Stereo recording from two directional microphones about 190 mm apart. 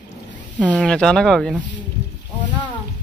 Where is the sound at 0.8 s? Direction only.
5° left (ahead or behind).